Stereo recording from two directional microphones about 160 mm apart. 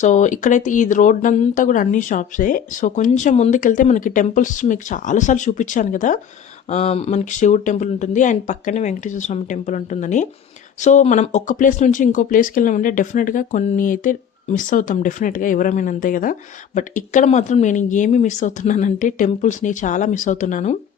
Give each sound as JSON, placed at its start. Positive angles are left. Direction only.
{"t": 0.0, "sound": "speech", "side_deg": 50}